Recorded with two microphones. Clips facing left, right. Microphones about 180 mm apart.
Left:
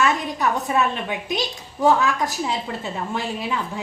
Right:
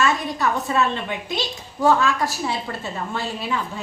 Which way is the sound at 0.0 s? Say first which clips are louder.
Even; 15° left (ahead or behind).